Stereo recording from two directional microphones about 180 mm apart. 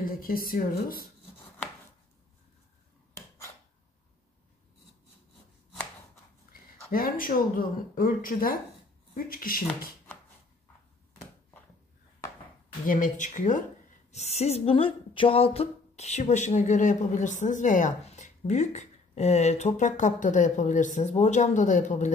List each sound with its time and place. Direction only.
0.0 s speech: 55° left (ahead or behind)
3.2 s a sound: 15° left (ahead or behind)
6.9 s speech: 55° left (ahead or behind)
12.8 s speech: 45° left (ahead or behind)